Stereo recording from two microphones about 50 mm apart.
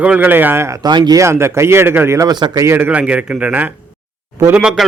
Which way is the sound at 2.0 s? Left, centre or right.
Right.